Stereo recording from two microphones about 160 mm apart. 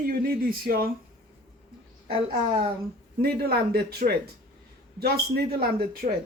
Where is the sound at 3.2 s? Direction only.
80° right.